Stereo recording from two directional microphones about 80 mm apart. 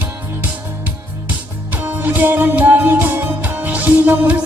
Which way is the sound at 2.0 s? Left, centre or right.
Right.